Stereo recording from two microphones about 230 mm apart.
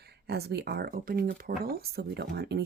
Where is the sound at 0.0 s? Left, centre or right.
Right.